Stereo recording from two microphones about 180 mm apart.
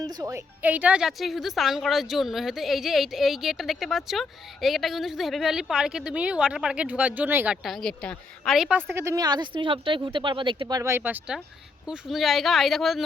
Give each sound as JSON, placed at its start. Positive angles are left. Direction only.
{"t": 0.0, "sound": "a woman's voice", "side_deg": -20}
{"t": 8.9, "sound": "a woman's voice", "side_deg": -15}